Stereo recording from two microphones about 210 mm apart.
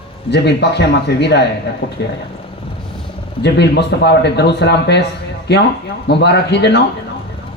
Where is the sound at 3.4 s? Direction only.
55° left (ahead or behind).